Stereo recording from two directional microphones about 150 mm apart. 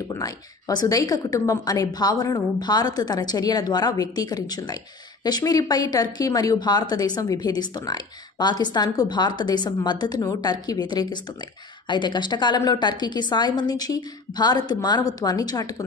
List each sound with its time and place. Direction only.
0.1 s speech: 25° left (ahead or behind)